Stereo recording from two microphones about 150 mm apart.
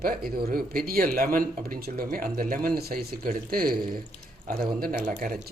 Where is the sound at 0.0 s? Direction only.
80° right.